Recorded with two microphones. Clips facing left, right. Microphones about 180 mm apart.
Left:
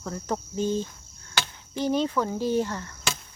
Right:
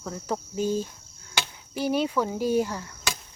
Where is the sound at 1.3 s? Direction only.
10° right (ahead or behind).